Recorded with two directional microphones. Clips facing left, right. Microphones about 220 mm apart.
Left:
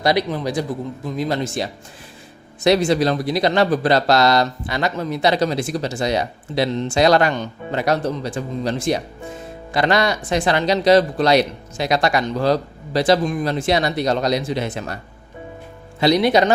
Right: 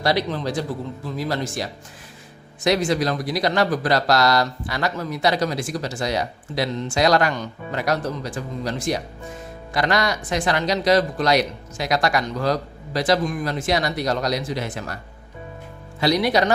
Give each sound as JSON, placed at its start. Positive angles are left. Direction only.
{"t": 0.0, "sound": "a man's voice", "side_deg": 15}
{"t": 16.0, "sound": "speech", "side_deg": 25}